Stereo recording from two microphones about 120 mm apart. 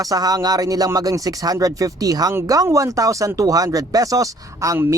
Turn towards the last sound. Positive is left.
turn(degrees=-15)  # may be behind; listen again after turning